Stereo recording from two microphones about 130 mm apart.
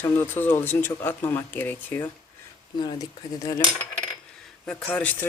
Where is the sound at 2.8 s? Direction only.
35° left (ahead or behind).